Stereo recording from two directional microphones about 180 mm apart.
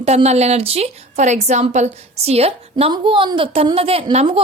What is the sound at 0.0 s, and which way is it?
A woman's voice, 35° right (ahead or behind).